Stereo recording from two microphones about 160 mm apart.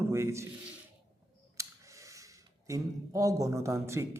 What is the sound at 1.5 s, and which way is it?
Camera, 20° right (ahead or behind).